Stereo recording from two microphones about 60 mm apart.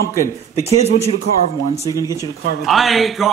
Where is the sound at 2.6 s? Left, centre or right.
Centre.